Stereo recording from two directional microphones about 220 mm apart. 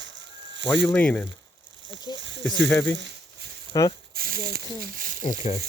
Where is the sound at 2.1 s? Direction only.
55° right (ahead or behind).